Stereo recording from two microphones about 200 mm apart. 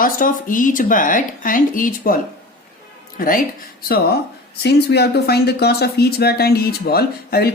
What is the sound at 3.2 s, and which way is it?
Speech, 45° left (ahead or behind).